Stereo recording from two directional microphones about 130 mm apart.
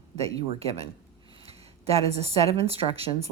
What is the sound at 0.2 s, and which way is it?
Speech, 50° right (ahead or behind).